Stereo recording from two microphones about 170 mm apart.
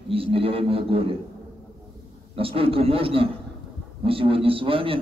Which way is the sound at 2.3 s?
35° right (ahead or behind).